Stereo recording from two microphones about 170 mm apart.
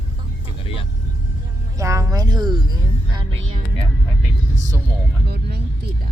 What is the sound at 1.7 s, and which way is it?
Speech, 20° right (ahead or behind).